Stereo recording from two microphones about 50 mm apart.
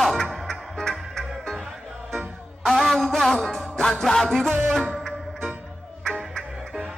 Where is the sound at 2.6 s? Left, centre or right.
Centre.